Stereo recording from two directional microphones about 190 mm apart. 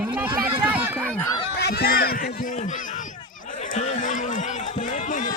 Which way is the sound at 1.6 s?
55° left (ahead or behind).